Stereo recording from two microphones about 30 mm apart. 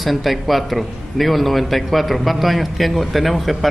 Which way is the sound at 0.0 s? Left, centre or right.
Centre.